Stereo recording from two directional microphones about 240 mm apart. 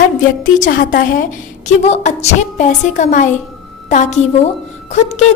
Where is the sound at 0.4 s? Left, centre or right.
Left.